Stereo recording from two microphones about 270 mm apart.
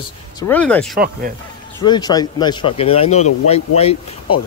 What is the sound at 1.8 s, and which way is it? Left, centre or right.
Speech, centre.